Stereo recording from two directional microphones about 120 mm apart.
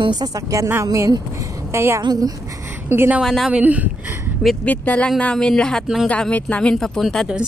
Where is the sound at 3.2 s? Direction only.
Centre (ahead or behind).